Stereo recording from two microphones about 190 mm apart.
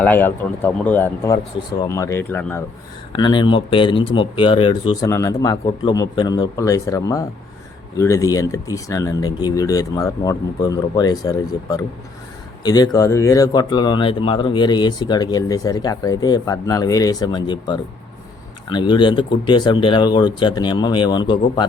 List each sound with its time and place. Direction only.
0.0 s speech: 10° left (ahead or behind)
3.1 s speech: 25° left (ahead or behind)